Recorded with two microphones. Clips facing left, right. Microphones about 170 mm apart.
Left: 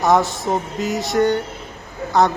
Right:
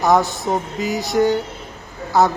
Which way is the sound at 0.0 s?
Centre (ahead or behind).